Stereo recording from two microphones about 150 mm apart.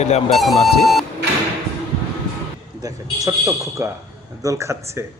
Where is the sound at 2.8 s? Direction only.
20° right (ahead or behind).